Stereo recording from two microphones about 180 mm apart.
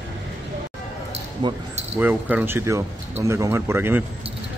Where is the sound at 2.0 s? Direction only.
10° right (ahead or behind).